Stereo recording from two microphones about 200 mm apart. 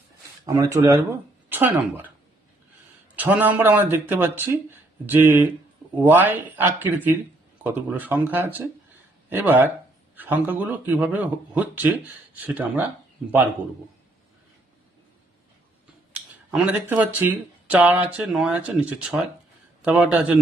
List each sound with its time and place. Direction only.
0.4 s speech: 15° right (ahead or behind)
3.2 s speech: 10° right (ahead or behind)
16.3 s speech: 10° right (ahead or behind)